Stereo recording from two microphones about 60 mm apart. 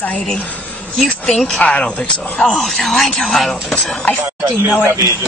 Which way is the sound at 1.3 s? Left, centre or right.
Centre.